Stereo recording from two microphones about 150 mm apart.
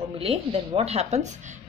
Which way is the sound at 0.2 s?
40° right (ahead or behind).